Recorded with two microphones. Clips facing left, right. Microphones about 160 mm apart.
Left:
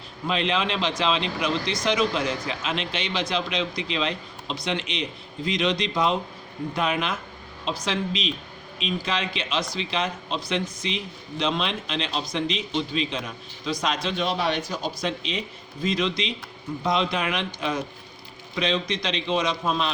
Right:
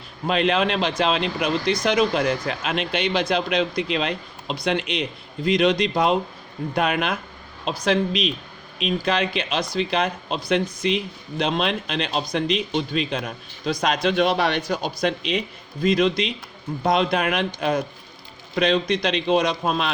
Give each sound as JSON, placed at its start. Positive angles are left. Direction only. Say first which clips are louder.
{"t": 0.3, "sound": "speech", "louder": "right 5 dB", "side_deg": -55}